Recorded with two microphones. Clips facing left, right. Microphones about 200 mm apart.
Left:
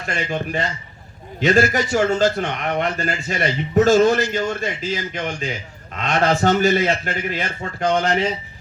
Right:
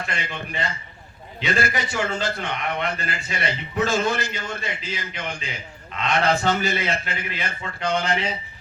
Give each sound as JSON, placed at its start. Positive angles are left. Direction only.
{"t": 0.2, "sound": "a man's voice", "side_deg": 45}